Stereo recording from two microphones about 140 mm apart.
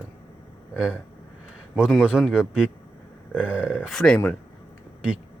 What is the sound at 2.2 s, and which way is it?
Speech, 5° right (ahead or behind).